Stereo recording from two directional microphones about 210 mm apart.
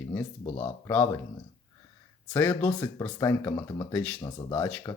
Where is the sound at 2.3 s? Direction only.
10° left (ahead or behind).